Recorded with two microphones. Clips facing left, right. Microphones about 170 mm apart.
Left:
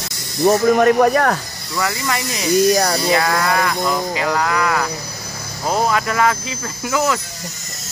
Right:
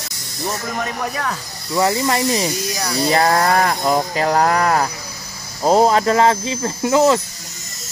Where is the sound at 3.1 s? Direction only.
35° right (ahead or behind).